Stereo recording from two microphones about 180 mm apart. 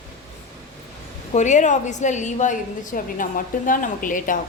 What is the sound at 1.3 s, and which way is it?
A woman's voice, 40° left (ahead or behind).